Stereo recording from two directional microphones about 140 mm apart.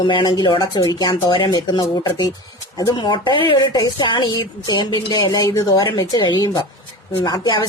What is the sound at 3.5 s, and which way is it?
Speech, 30° left (ahead or behind).